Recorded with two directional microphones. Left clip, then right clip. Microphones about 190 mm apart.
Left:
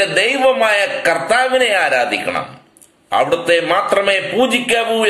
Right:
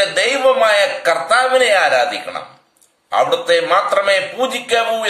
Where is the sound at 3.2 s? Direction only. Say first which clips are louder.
Even; 10° right (ahead or behind).